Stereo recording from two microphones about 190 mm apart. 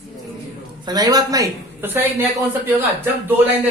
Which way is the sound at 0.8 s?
20° right (ahead or behind).